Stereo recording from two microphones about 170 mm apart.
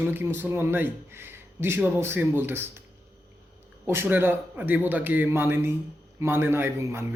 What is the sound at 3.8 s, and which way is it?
Speech, 15° right (ahead or behind).